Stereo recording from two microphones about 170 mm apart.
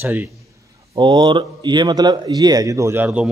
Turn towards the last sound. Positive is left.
turn(degrees=-10)  # may be behind; listen again after turning